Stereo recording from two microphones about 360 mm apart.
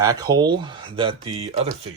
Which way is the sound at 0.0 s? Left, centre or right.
Centre.